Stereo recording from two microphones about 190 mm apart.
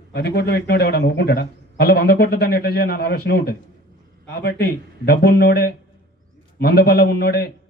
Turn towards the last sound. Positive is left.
turn(degrees=55)  # may be behind; listen again after turning